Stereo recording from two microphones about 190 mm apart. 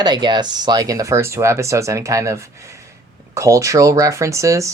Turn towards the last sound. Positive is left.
turn(degrees=-15)  # may be behind; listen again after turning